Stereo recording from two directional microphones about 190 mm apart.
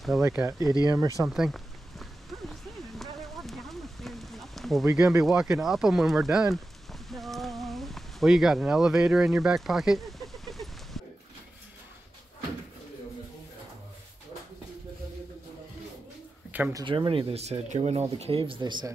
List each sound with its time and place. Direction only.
0.2 s speech: 15° right (ahead or behind)
1.2 s speech: centre (ahead or behind)
2.5 s a sound: centre (ahead or behind)
16.5 s speech: 10° right (ahead or behind)
16.8 s speech: 25° right (ahead or behind)